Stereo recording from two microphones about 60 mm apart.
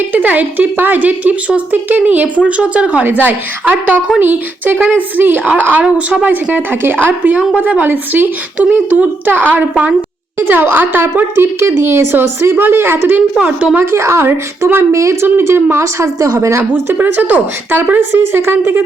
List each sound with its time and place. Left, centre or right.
0.1 s a woman's voice: right
13.9 s a woman's voice: right
14.9 s a woman's voice: right
15.4 s a woman's voice: right
15.7 s a woman's voice: right
16.6 s a woman's voice: right